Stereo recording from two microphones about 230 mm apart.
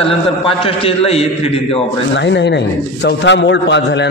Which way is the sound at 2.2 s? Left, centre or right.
Left.